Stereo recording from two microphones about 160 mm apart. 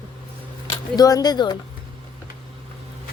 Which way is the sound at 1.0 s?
25° left (ahead or behind).